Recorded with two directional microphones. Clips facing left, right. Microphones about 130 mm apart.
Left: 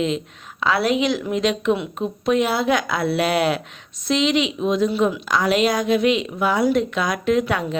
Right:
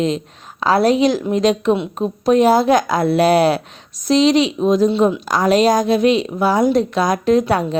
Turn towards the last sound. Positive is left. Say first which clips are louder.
# right 5 dB
turn(degrees=-35)  # may be behind; listen again after turning